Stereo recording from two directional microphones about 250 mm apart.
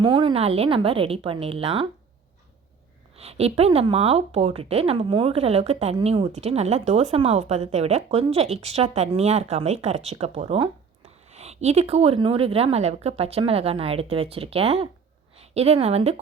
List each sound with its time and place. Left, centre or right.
0.0 s speech: centre
3.2 s speech: right